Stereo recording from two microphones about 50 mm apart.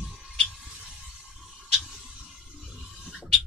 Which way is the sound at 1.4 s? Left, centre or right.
Centre.